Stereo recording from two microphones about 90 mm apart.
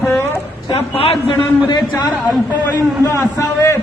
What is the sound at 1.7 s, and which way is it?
Speech, 50° left (ahead or behind).